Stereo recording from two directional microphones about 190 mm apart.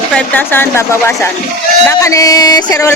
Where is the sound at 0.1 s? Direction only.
5° left (ahead or behind).